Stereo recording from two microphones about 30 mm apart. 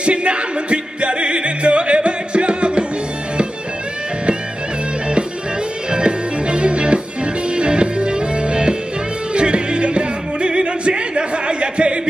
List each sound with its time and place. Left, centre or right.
0.0 s music: right
5.9 s music: right